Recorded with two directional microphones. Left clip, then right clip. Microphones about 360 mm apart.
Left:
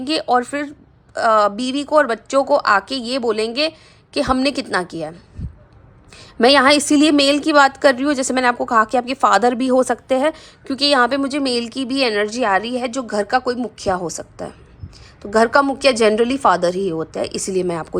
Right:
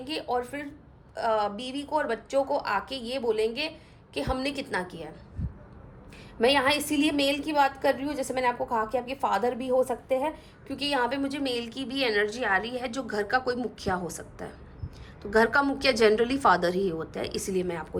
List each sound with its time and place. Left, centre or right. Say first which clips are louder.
0.0 s a woman's voice: left 13 dB; centre
6.1 s a woman's voice: left 11 dB; centre